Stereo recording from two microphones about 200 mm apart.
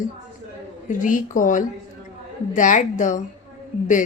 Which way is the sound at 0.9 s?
40° left (ahead or behind).